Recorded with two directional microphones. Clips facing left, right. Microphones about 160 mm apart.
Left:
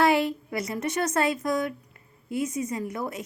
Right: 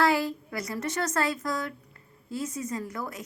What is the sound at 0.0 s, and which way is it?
A woman's voice, 20° left (ahead or behind).